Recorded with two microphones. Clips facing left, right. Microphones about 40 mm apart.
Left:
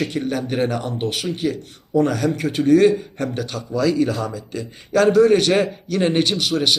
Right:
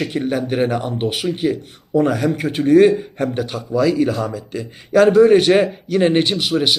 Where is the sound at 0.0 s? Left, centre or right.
Centre.